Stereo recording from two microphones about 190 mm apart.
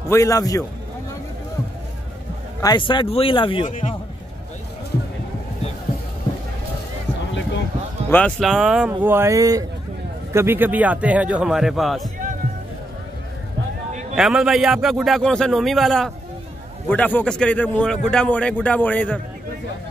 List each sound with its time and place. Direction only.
0.1 s a man's voice: 15° left (ahead or behind)
2.6 s speech: 25° left (ahead or behind)
3.6 s a man's voice: 40° left (ahead or behind)
8.1 s a man's voice: 5° left (ahead or behind)
14.1 s a man's voice: 5° right (ahead or behind)